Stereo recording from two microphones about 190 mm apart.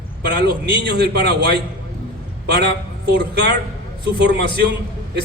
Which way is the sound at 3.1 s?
60° right (ahead or behind).